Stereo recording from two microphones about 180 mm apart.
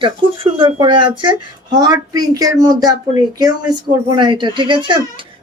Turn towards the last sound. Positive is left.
turn(degrees=-25)  # may be behind; listen again after turning